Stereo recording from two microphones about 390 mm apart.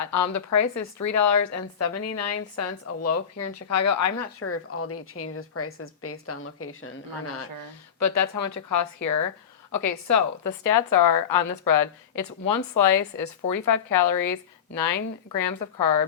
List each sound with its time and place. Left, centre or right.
0.0 s speech: left
7.9 s a woman's voice: left